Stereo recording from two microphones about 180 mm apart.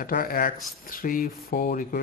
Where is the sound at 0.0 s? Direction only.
55° left (ahead or behind).